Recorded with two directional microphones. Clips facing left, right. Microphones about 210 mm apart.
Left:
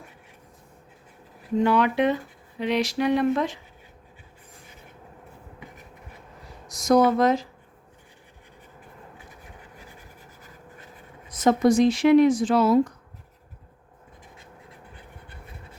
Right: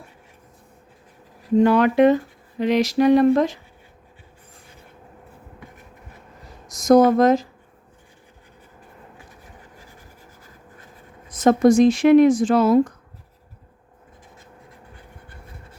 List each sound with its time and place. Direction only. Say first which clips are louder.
1.6 s speech: right 6 dB; 45° right (ahead or behind)
6.7 s speech: right 5 dB; 45° right (ahead or behind)
11.3 s speech: right 4 dB; 45° right (ahead or behind)